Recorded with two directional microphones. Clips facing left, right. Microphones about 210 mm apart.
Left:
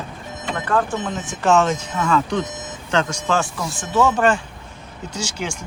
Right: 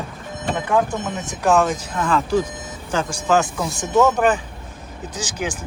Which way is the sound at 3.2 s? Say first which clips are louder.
Right 3 dB; 15° right (ahead or behind).